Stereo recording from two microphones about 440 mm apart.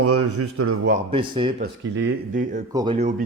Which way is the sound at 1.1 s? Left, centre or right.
Centre.